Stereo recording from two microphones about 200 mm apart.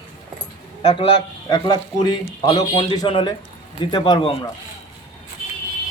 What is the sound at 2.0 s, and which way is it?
Speech, 25° left (ahead or behind).